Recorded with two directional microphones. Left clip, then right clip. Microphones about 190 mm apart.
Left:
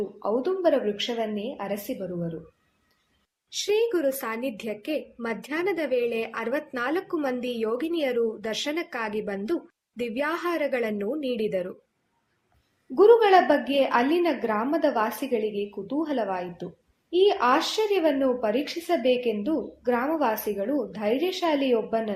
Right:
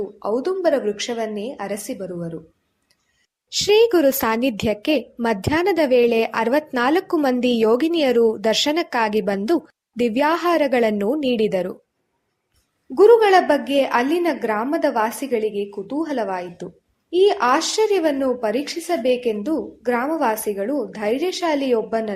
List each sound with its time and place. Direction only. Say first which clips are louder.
0.2 s speech: right 4 dB; 35° right (ahead or behind)
3.5 s a woman's voice: right 9 dB; 40° right (ahead or behind)
12.9 s speech: right 5 dB; 35° right (ahead or behind)